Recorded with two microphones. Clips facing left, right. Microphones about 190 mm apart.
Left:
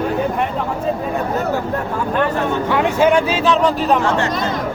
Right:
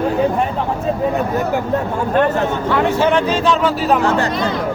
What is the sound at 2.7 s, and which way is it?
Speech, 15° left (ahead or behind).